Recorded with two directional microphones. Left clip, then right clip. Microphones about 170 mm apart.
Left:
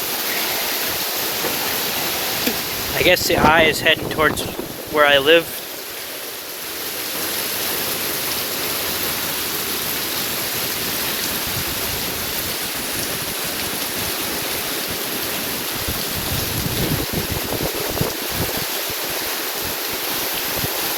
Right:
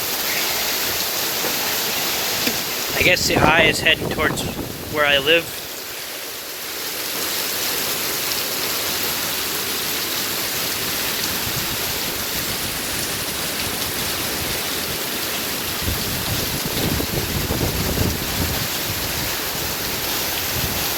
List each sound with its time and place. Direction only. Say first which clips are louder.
3.0 s speech: left 1 dB; 30° left (ahead or behind)